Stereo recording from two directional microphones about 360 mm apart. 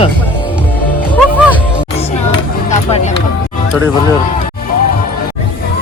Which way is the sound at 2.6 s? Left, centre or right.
Centre.